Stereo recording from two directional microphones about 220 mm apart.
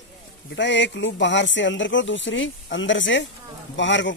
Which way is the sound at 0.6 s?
55° left (ahead or behind).